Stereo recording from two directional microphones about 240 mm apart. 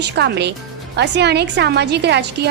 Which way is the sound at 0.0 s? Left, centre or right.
Right.